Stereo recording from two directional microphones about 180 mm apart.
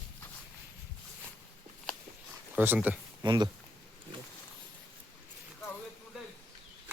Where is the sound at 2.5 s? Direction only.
10° right (ahead or behind).